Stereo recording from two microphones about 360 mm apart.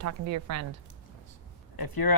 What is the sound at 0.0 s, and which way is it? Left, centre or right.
Speech, right.